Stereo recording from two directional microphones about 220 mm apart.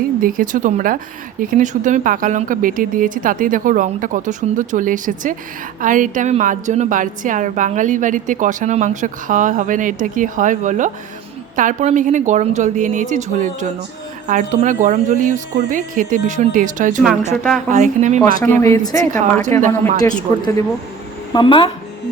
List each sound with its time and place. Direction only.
0.2 s a woman's voice: 40° right (ahead or behind)
17.3 s speech: centre (ahead or behind)
17.7 s a woman's voice: 35° right (ahead or behind)
18.3 s speech: 10° left (ahead or behind)
18.9 s a woman's voice: 35° right (ahead or behind)
20.0 s speech: 15° left (ahead or behind)